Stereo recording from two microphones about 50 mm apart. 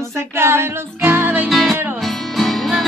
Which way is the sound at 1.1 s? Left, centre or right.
Right.